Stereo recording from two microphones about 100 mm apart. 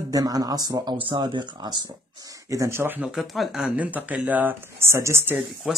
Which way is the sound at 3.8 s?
15° right (ahead or behind).